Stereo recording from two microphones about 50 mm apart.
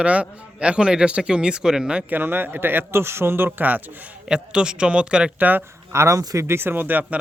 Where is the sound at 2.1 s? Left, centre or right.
Right.